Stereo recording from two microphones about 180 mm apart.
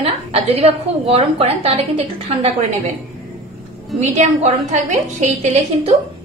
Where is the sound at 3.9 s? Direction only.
40° right (ahead or behind).